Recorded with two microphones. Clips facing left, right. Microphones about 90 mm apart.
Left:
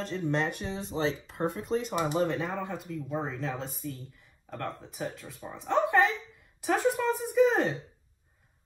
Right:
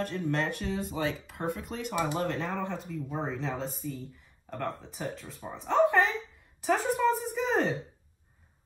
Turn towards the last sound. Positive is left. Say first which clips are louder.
# left 5 dB
turn(degrees=5)  # may be behind; listen again after turning